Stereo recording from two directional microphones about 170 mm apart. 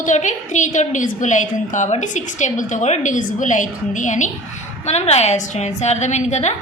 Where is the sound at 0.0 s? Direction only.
45° left (ahead or behind).